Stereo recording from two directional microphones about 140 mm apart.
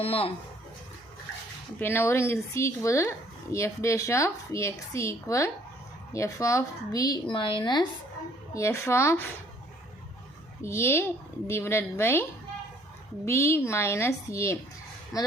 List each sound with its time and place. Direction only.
0.0 s speech: 45° left (ahead or behind)
1.8 s speech: 15° left (ahead or behind); by 7.9 s 35° left (ahead or behind)
8.5 s speech: 20° left (ahead or behind)
10.6 s a woman's voice: 20° left (ahead or behind)
13.2 s speech: 20° left (ahead or behind)
15.1 s a man's voice: centre (ahead or behind)